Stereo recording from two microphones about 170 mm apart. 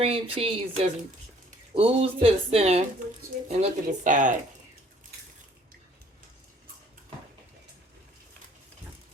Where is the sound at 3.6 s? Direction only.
50° right (ahead or behind).